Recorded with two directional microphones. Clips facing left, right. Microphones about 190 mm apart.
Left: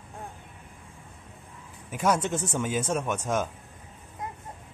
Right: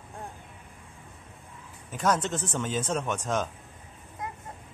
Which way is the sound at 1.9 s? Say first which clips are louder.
Left 1 dB; 10° left (ahead or behind).